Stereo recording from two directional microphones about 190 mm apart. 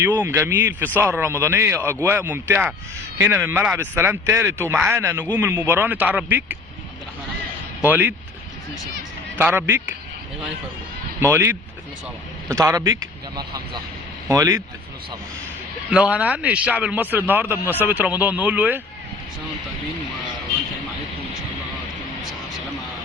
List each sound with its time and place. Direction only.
0.0 s speech: 10° right (ahead or behind)
7.9 s speech: 10° right (ahead or behind)
9.4 s speech: 10° right (ahead or behind)
11.2 s speech: 15° right (ahead or behind)
14.3 s speech: 15° right (ahead or behind)
15.9 s speech: 5° right (ahead or behind)
22.2 s music: centre (ahead or behind)